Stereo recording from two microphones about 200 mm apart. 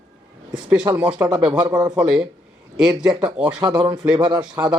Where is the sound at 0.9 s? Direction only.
5° right (ahead or behind).